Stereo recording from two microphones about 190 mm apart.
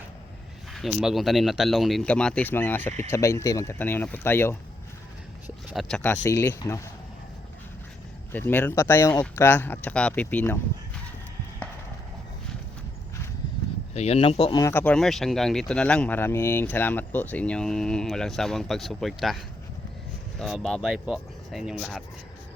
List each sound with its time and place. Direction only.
0.7 s speech: centre (ahead or behind)
5.7 s speech: 5° left (ahead or behind)
8.3 s speech: 10° left (ahead or behind)
13.9 s speech: 35° left (ahead or behind)
14.6 s speech: 10° left (ahead or behind)
20.4 s speech: centre (ahead or behind)